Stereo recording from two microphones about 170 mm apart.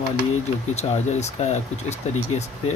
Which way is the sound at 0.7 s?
40° left (ahead or behind).